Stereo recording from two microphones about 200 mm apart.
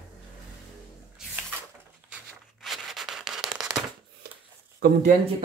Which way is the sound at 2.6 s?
Centre (ahead or behind).